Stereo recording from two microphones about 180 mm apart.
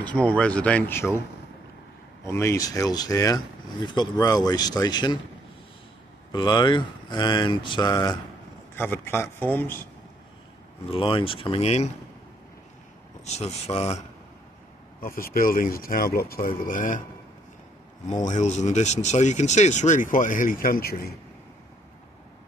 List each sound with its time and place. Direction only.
0.0 s speech: 5° left (ahead or behind)
2.2 s speech: 15° left (ahead or behind)
6.3 s speech: 25° left (ahead or behind)
8.7 s speech: 10° left (ahead or behind)
10.9 s speech: 30° left (ahead or behind)
13.2 s speech: 35° left (ahead or behind)
15.0 s speech: 50° left (ahead or behind)
18.1 s speech: 45° left (ahead or behind)